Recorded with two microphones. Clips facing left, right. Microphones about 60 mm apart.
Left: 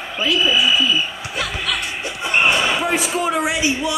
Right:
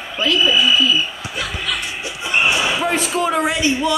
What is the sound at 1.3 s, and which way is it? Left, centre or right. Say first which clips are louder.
Music: left 1 dB; left.